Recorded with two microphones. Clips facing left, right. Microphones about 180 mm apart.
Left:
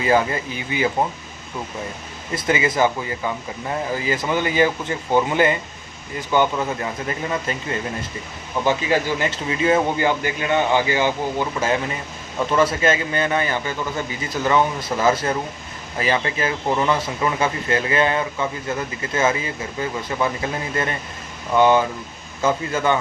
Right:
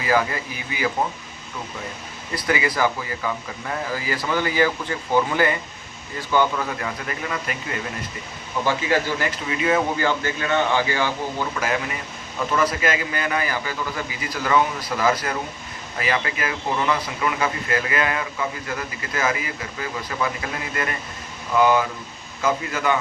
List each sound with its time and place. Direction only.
0.0 s speech: 25° left (ahead or behind)
2.3 s speech: 20° left (ahead or behind)
10.1 s a man's voice: 15° left (ahead or behind)
21.5 s speech: 30° left (ahead or behind)